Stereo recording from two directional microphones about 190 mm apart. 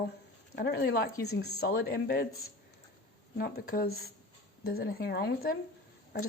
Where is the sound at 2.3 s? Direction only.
90° left.